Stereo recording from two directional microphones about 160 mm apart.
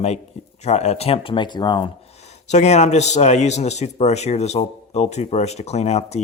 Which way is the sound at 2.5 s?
45° left (ahead or behind).